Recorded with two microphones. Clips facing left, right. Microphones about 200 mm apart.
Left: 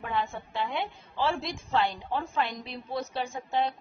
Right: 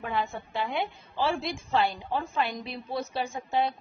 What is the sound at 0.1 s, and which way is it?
A woman's voice, 10° right (ahead or behind).